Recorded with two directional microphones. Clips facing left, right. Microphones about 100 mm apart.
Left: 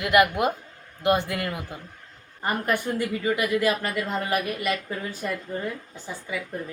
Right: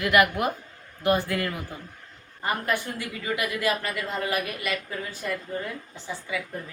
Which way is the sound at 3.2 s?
30° left (ahead or behind).